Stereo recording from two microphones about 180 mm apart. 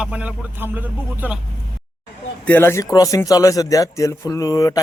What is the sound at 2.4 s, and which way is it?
A man's voice, 10° left (ahead or behind).